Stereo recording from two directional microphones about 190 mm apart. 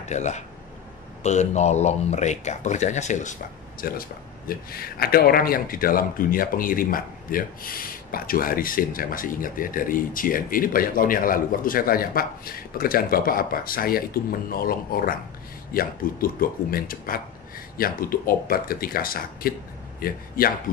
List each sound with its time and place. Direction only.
0.0 s a man's voice: 35° left (ahead or behind)
3.8 s a man's voice: 50° left (ahead or behind)